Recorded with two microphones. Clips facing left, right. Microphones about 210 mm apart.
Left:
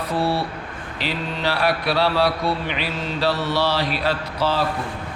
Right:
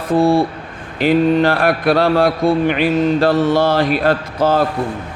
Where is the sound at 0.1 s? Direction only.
50° right (ahead or behind).